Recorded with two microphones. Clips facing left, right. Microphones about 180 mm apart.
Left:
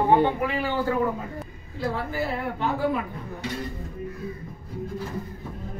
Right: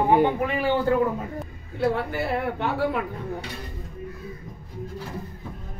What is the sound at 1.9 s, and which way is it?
Speech, 65° right (ahead or behind).